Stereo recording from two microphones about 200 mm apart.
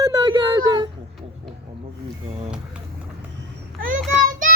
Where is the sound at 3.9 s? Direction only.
45° right (ahead or behind).